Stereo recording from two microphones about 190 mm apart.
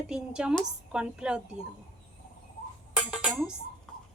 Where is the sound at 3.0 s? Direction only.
5° right (ahead or behind).